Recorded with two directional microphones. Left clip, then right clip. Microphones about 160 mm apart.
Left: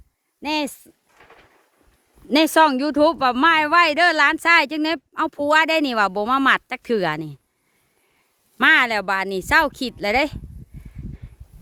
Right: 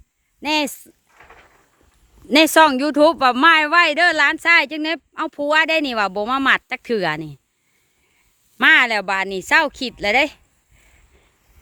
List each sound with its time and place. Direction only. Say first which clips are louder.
0.4 s speech: right 4 dB; 15° right (ahead or behind)
1.2 s a sound: right 3 dB; 40° right (ahead or behind)
2.3 s speech: right 3 dB; 10° right (ahead or behind)
3.7 s speech: right 1 dB; 10° left (ahead or behind)
8.5 s speech: right 2 dB; 5° left (ahead or behind)